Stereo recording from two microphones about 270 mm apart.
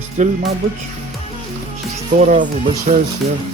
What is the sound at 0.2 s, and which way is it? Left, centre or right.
Speech, right.